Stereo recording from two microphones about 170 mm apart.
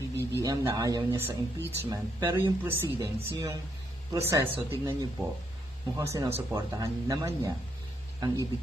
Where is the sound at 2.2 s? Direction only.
25° right (ahead or behind).